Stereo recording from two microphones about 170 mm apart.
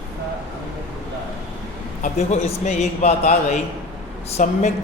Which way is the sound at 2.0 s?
40° left (ahead or behind).